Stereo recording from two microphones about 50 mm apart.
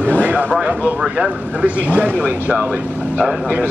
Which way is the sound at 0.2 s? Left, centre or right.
Right.